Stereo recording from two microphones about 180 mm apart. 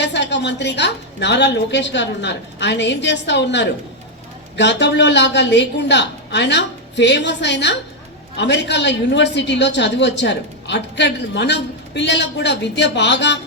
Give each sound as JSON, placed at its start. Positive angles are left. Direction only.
{"t": 0.0, "sound": "a woman's voice", "side_deg": 75}